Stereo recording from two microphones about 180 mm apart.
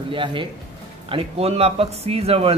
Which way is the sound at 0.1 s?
25° right (ahead or behind).